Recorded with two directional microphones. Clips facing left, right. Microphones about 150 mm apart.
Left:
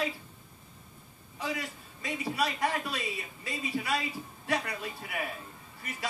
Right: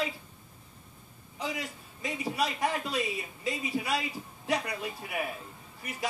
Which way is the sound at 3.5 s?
20° right (ahead or behind).